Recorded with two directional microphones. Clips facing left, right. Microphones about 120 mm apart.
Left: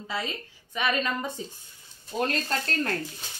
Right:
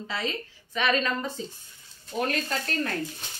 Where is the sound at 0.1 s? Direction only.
10° left (ahead or behind).